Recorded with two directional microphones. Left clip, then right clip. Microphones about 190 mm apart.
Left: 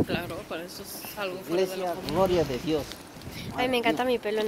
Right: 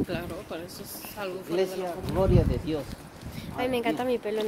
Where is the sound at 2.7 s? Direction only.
45° left (ahead or behind).